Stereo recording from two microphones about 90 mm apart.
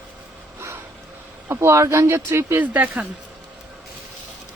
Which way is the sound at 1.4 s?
30° right (ahead or behind).